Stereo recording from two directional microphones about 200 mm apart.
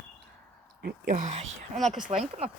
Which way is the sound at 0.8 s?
45° right (ahead or behind).